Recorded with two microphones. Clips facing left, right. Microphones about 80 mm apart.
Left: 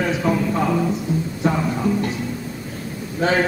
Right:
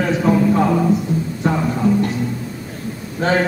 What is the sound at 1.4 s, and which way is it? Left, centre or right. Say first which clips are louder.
Music: right 2 dB; centre.